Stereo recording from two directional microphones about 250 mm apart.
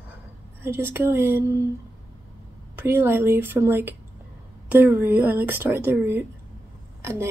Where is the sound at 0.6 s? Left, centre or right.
Centre.